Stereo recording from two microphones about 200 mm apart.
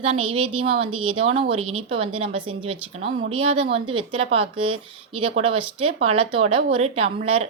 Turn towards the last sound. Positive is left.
turn(degrees=-30)  # may be behind; listen again after turning